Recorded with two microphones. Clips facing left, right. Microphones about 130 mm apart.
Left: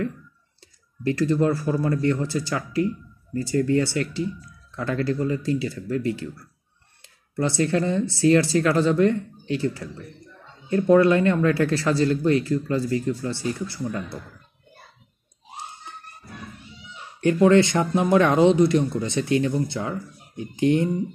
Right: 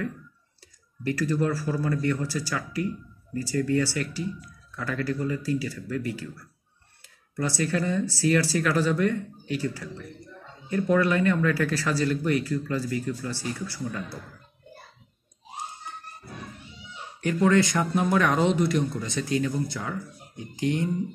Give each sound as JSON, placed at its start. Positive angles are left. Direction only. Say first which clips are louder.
{"t": 1.0, "sound": "speech", "louder": "left 5 dB", "side_deg": 25}
{"t": 17.2, "sound": "speech", "louder": "left 5 dB", "side_deg": 25}